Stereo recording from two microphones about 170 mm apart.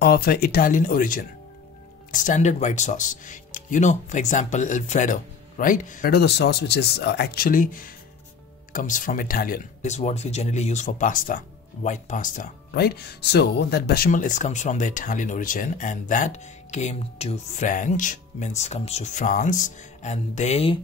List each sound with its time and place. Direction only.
0.0 s speech: 65° left (ahead or behind)
6.1 s speech: 75° left (ahead or behind); by 12.4 s 50° left (ahead or behind)
12.7 s speech: 70° left (ahead or behind); by 20.8 s 35° left (ahead or behind)